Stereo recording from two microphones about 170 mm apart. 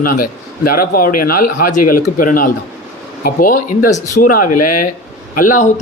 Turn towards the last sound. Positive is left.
turn(degrees=50)  # may be behind; listen again after turning